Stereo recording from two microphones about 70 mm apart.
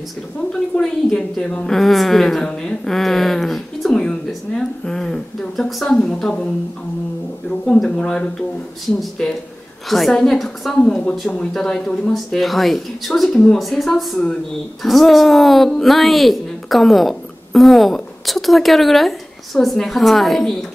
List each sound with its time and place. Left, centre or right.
0.5 s a woman's voice: centre
1.7 s a woman's voice: centre
7.4 s a woman's voice: centre
10.8 s a woman's voice: centre